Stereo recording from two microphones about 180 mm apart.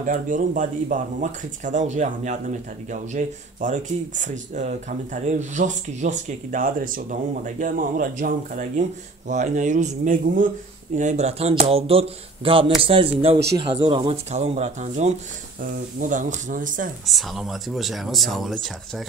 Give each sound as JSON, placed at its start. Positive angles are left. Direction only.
{"t": 0.0, "sound": "speech", "side_deg": -45}
{"t": 17.0, "sound": "speech", "side_deg": 0}